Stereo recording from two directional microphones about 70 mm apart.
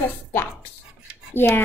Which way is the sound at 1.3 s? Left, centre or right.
Left.